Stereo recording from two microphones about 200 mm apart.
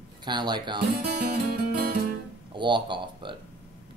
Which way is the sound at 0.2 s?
20° right (ahead or behind).